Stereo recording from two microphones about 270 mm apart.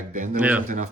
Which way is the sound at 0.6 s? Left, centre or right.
Right.